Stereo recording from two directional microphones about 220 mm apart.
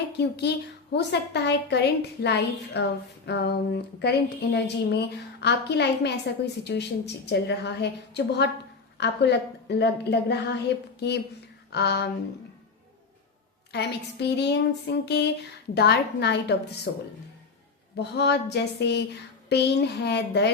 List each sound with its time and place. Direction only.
0.2 s a woman's voice: 50° left (ahead or behind)
11.7 s a woman's voice: 50° left (ahead or behind)
13.7 s a woman's voice: 50° left (ahead or behind)
17.9 s a woman's voice: 50° left (ahead or behind)